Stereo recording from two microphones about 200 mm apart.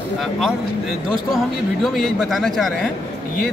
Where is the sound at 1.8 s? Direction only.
Centre (ahead or behind).